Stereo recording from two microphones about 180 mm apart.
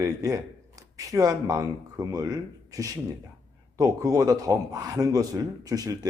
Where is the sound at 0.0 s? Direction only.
20° right (ahead or behind).